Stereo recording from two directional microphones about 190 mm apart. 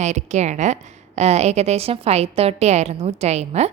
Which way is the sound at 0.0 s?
35° right (ahead or behind).